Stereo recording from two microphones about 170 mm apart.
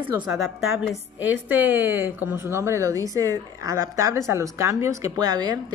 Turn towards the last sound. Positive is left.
turn(degrees=-25)  # may be behind; listen again after turning